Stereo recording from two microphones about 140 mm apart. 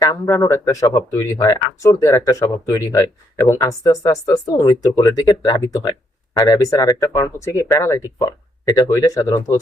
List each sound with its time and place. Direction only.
0.0 s speech: 20° left (ahead or behind)